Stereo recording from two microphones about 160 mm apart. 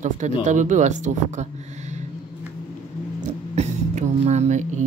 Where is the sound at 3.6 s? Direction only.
45° right (ahead or behind).